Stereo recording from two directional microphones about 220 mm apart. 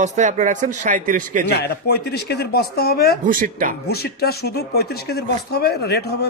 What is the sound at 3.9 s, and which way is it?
Speech, 45° left (ahead or behind).